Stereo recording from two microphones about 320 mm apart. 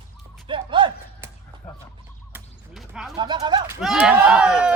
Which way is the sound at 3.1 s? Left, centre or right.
Centre.